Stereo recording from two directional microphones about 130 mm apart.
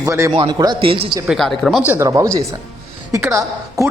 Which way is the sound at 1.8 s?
15° right (ahead or behind).